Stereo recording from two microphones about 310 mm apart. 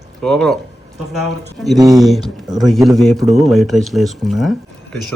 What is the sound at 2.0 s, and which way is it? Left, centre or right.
A man's voice, centre.